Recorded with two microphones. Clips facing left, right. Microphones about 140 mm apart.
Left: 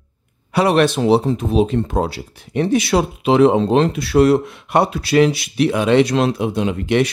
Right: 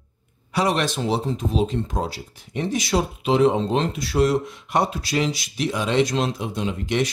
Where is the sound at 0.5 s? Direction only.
65° left (ahead or behind).